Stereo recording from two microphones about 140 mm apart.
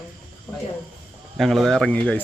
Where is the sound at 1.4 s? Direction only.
Centre (ahead or behind).